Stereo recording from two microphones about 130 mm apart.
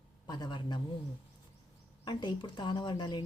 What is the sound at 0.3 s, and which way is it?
Speech, 35° left (ahead or behind).